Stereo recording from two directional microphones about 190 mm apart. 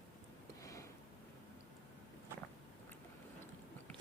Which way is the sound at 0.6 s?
15° left (ahead or behind).